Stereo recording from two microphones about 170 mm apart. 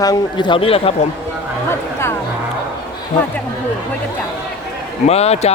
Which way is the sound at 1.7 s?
15° left (ahead or behind).